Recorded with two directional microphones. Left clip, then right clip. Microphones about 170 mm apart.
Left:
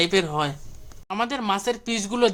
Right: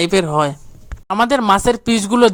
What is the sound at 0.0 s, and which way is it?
Speech, 45° right (ahead or behind).